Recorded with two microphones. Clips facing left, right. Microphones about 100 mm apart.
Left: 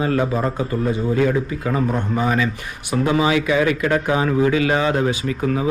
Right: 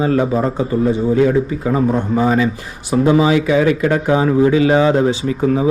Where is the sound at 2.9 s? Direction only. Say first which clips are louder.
Right 5 dB; 30° right (ahead or behind).